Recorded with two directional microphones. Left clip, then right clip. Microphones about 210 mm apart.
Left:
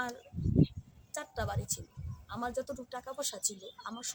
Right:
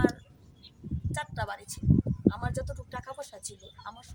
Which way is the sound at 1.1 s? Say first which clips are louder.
Right 2 dB; 5° right (ahead or behind).